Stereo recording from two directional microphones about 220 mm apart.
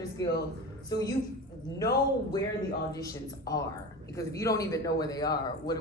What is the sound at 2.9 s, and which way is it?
A woman's voice, 15° left (ahead or behind).